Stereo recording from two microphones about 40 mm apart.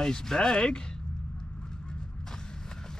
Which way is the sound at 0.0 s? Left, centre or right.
Centre.